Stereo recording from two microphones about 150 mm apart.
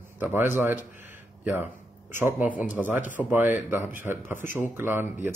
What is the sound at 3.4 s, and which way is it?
Speech, 55° left (ahead or behind).